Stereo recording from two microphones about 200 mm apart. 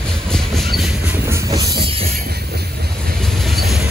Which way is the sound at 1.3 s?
15° right (ahead or behind).